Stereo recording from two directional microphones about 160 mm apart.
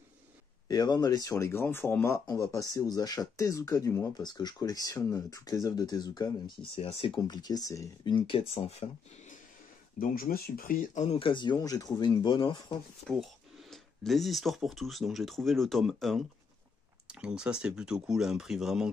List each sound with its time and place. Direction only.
0.7 s speech: 25° left (ahead or behind)
7.2 s speech: 25° left (ahead or behind)
9.9 s speech: 65° left (ahead or behind)
11.1 s speech: 35° left (ahead or behind)
13.0 s speech: centre (ahead or behind)